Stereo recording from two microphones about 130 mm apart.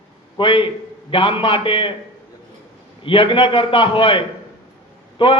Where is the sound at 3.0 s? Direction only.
45° left (ahead or behind).